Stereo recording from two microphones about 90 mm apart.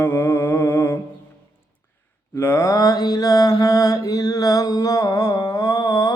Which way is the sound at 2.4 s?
30° left (ahead or behind).